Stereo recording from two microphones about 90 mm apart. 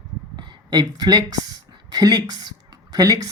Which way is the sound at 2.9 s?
45° right (ahead or behind).